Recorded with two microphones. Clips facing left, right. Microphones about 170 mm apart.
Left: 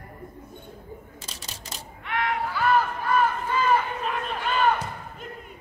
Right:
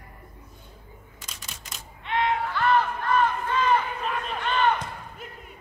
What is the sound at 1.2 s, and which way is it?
Single-lens reflex camera, 35° left (ahead or behind).